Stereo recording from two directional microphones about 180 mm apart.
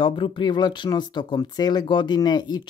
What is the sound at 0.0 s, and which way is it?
Speech, 25° left (ahead or behind).